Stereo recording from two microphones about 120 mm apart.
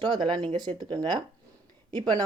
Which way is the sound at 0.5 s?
35° right (ahead or behind).